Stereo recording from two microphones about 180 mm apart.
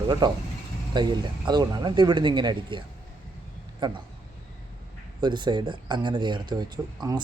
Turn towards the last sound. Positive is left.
turn(degrees=-25)  # may be behind; listen again after turning